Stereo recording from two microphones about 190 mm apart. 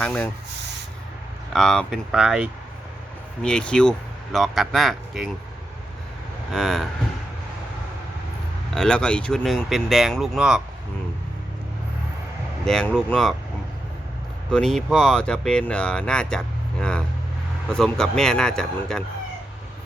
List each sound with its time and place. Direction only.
0.0 s speech: 5° left (ahead or behind)
1.5 s speech: 5° left (ahead or behind)
6.5 s speech: centre (ahead or behind)
8.7 s speech: 5° left (ahead or behind)
12.6 s speech: 5° left (ahead or behind)
14.5 s speech: centre (ahead or behind)
17.7 s speech: 5° left (ahead or behind)